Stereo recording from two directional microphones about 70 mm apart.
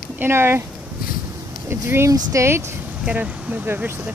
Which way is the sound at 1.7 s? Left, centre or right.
Right.